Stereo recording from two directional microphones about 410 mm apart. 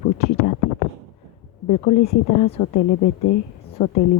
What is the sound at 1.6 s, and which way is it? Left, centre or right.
Speech, left.